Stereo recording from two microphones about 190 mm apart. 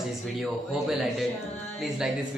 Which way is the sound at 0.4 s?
Centre (ahead or behind).